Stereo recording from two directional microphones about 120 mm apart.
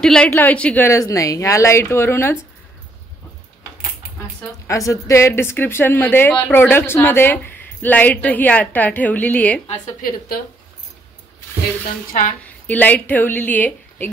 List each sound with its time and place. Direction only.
0.0 s a woman's voice: 5° left (ahead or behind)
0.8 s a woman's voice: 25° left (ahead or behind)
4.6 s a woman's voice: 25° left (ahead or behind)
12.6 s a woman's voice: 15° left (ahead or behind)